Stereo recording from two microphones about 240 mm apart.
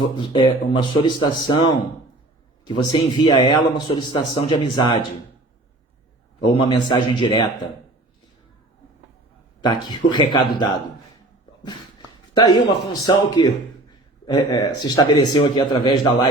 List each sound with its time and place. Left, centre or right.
0.0 s a man's voice: left
6.5 s speech: left
9.6 s a man's voice: centre
12.3 s a man's voice: centre